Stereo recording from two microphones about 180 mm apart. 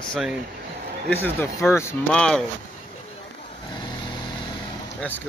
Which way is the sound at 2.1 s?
5° left (ahead or behind).